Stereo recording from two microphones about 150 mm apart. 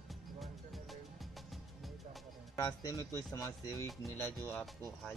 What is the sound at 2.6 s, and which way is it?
Speech, 25° left (ahead or behind).